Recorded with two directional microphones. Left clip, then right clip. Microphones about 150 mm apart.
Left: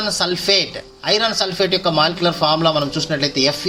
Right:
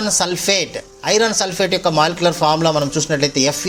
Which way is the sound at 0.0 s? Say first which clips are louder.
Right 1 dB; 35° right (ahead or behind).